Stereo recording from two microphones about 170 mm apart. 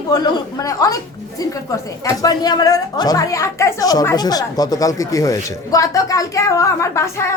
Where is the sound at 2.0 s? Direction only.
20° left (ahead or behind).